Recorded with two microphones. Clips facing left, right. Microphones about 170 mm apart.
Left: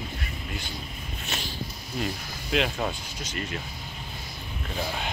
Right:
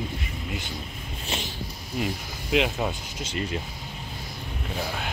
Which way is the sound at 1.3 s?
30° right (ahead or behind).